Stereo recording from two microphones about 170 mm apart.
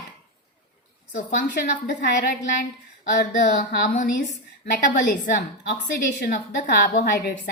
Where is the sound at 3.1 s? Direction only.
70° left (ahead or behind).